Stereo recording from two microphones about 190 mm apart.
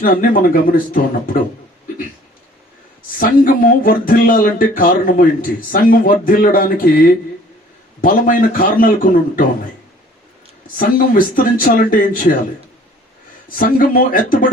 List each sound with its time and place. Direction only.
0.0 s speech: 50° left (ahead or behind)
3.2 s speech: 45° left (ahead or behind)
10.8 s speech: 50° left (ahead or behind)
13.6 s speech: 50° left (ahead or behind)